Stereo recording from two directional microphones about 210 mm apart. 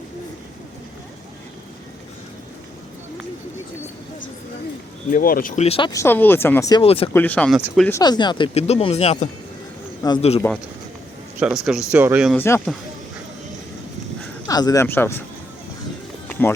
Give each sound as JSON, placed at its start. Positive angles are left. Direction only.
{"t": 5.1, "sound": "speech", "side_deg": 40}
{"t": 7.1, "sound": "speech", "side_deg": 5}
{"t": 7.9, "sound": "speech", "side_deg": 15}
{"t": 11.3, "sound": "speech", "side_deg": -5}
{"t": 12.4, "sound": "speech", "side_deg": 10}
{"t": 14.4, "sound": "speech", "side_deg": 15}